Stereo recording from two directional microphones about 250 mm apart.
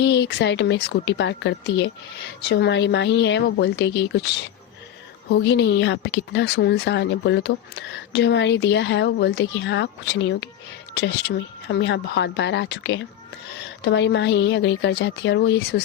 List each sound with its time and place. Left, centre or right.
0.0 s speech: left
5.3 s speech: left